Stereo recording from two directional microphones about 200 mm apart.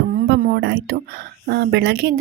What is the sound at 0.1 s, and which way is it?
A woman's voice, 45° right (ahead or behind).